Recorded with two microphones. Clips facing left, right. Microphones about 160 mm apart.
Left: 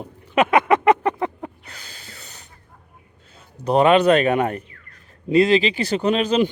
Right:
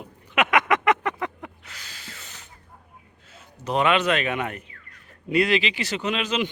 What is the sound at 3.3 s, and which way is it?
Speech, 35° left (ahead or behind).